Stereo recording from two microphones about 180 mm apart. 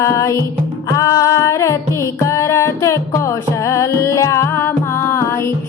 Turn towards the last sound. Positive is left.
turn(degrees=15)  # may be behind; listen again after turning